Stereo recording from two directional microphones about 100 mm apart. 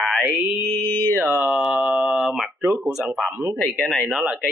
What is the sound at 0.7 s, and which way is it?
Mantra, 20° left (ahead or behind).